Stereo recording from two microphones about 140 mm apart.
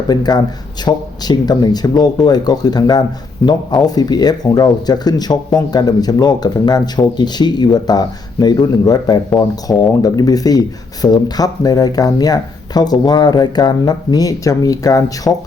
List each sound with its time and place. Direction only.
0.1 s speech: 30° left (ahead or behind)